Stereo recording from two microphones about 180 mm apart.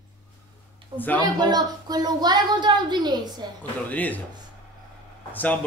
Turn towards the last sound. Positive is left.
turn(degrees=10)  # may be behind; listen again after turning